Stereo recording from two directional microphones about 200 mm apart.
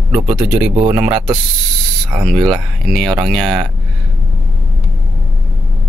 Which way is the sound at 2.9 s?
Centre (ahead or behind).